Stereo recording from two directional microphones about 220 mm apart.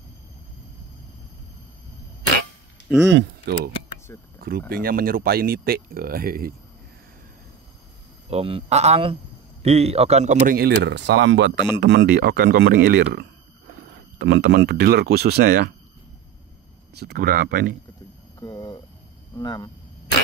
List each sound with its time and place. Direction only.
3.1 s speech: 50° right (ahead or behind)
8.3 s speech: 25° right (ahead or behind); by 15.7 s 45° right (ahead or behind)
16.9 s speech: 45° right (ahead or behind)
18.4 s a sound: 15° left (ahead or behind)
19.3 s speech: 15° left (ahead or behind)